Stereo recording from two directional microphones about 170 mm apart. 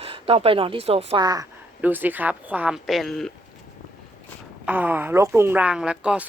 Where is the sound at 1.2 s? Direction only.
20° right (ahead or behind).